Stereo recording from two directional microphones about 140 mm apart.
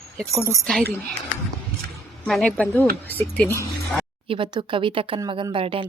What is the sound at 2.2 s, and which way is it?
Speech, 5° left (ahead or behind).